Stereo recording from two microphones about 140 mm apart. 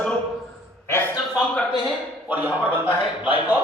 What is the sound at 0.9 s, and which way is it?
Speech, 15° left (ahead or behind).